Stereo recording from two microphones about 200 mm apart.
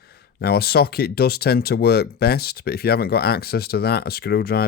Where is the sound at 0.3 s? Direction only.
50° left (ahead or behind).